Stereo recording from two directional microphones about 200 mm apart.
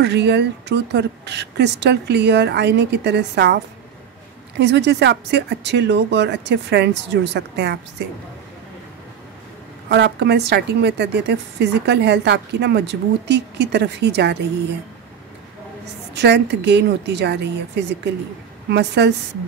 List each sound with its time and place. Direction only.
0.0 s speech: 55° right (ahead or behind)
4.6 s speech: 60° right (ahead or behind)
9.8 s speech: 60° right (ahead or behind)
16.2 s speech: 60° right (ahead or behind)